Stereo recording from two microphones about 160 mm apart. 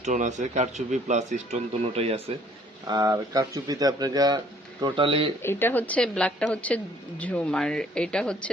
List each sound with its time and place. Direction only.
0.0 s speech: 50° right (ahead or behind)
2.8 s speech: 25° right (ahead or behind)
5.4 s a woman's voice: 15° left (ahead or behind)